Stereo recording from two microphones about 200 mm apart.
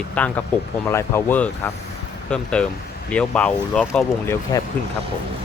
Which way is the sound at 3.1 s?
5° left (ahead or behind).